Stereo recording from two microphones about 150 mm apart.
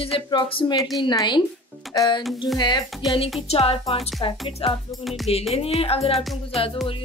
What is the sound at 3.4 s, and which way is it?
Speech, 40° left (ahead or behind).